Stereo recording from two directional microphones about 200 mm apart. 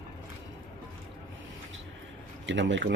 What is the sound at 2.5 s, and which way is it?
Speech, 65° right (ahead or behind).